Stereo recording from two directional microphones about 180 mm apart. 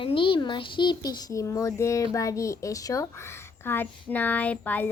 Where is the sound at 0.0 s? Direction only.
30° left (ahead or behind).